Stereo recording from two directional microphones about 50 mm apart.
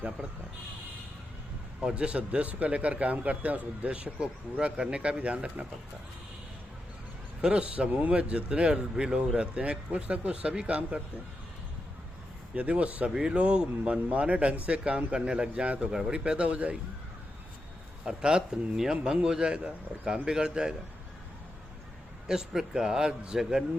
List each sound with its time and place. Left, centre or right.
1.8 s speech: centre
7.4 s speech: right
12.5 s speech: right
18.0 s speech: centre
22.3 s speech: centre